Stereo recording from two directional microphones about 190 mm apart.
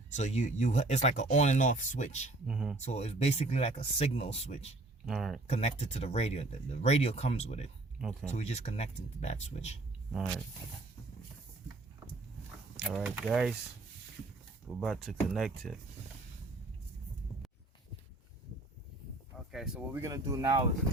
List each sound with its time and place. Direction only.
0.1 s speech: 35° left (ahead or behind)
2.5 s speech: 5° right (ahead or behind)
2.8 s speech: 35° left (ahead or behind)
5.0 s speech: centre (ahead or behind)
5.5 s speech: 35° left (ahead or behind)
7.9 s speech: 5° right (ahead or behind)
8.3 s speech: 35° left (ahead or behind)
10.1 s speech: 5° right (ahead or behind)
12.8 s speech: 5° right (ahead or behind)
14.8 s speech: centre (ahead or behind)
19.5 s speech: centre (ahead or behind)
20.0 s speech: 15° right (ahead or behind)